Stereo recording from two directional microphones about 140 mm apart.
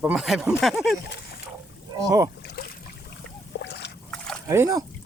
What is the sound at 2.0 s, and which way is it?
Speech, 25° right (ahead or behind).